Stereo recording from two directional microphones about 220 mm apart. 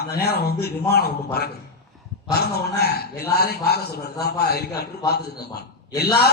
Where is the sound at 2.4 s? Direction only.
45° left (ahead or behind).